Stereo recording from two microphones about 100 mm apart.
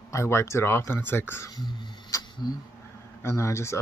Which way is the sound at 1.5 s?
45° left (ahead or behind).